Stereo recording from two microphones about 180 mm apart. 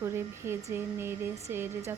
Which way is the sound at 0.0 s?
15° right (ahead or behind).